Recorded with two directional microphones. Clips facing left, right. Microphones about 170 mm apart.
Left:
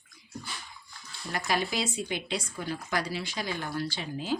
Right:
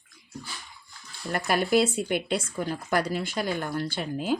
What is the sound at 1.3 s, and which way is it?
Speech, 55° right (ahead or behind).